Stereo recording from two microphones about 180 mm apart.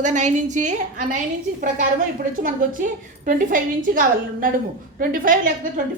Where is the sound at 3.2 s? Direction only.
50° right (ahead or behind).